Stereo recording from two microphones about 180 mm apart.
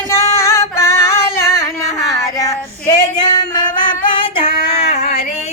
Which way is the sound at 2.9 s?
25° left (ahead or behind).